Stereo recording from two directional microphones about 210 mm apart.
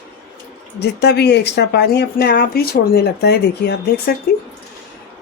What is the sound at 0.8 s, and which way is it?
Speech, 50° left (ahead or behind).